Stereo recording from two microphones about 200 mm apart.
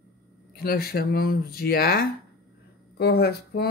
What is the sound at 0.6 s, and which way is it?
Speech, 50° left (ahead or behind).